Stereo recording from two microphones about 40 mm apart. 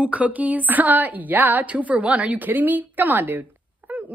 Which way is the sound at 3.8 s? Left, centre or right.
Right.